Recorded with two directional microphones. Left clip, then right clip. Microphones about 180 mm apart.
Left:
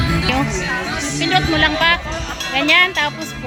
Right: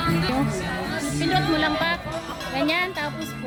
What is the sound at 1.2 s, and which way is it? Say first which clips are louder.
A woman's voice: left 7 dB; centre (ahead or behind).